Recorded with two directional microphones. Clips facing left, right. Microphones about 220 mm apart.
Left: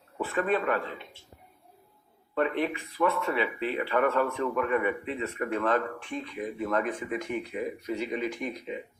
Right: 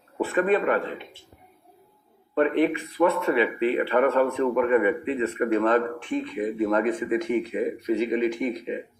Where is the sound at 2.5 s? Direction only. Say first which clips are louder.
Right 8 dB; 65° right (ahead or behind).